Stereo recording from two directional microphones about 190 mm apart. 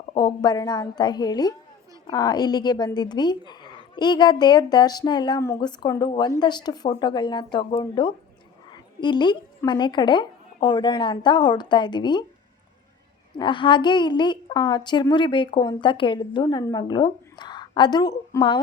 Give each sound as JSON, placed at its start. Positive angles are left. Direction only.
{"t": 0.2, "sound": "a woman's voice", "side_deg": 20}
{"t": 8.7, "sound": "dog", "side_deg": 25}
{"t": 9.6, "sound": "a woman's voice", "side_deg": 25}
{"t": 13.3, "sound": "a woman's voice", "side_deg": 25}